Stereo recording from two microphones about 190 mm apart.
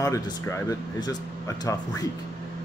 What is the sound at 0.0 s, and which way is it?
Speech, 15° left (ahead or behind).